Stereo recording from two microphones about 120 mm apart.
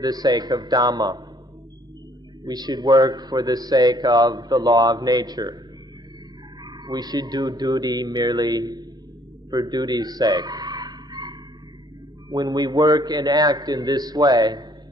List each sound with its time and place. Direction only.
0.0 s a man's voice: 35° right (ahead or behind)
2.4 s a man's voice: 35° right (ahead or behind)
6.6 s a man's voice: 35° right (ahead or behind)
9.5 s a sound: 35° right (ahead or behind)
12.3 s a man's voice: 35° right (ahead or behind)